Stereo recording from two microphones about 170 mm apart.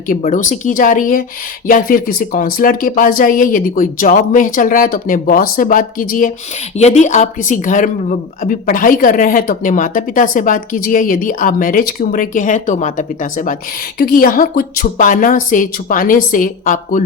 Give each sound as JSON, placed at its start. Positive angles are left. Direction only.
{"t": 0.2, "sound": "speech", "side_deg": 50}
{"t": 6.7, "sound": "speech", "side_deg": 40}